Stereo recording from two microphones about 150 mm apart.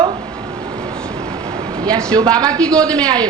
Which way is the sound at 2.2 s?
25° right (ahead or behind).